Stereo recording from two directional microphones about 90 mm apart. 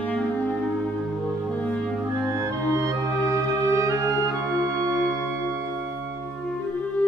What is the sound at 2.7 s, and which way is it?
Music, 35° right (ahead or behind).